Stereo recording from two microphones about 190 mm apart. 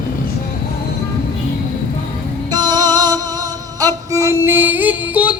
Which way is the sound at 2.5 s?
20° right (ahead or behind).